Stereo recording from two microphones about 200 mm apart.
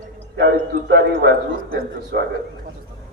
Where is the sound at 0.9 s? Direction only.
55° right (ahead or behind).